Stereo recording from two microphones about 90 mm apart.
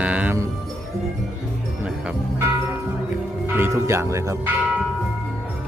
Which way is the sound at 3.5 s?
30° right (ahead or behind).